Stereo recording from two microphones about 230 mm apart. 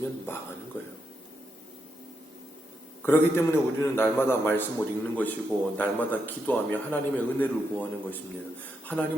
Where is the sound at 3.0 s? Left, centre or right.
Centre.